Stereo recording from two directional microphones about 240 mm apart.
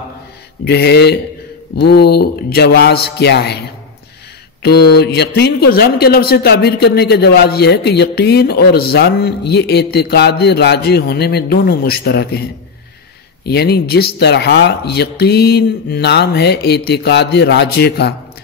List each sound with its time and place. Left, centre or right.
0.7 s speech: left
4.9 s speech: left
13.5 s speech: left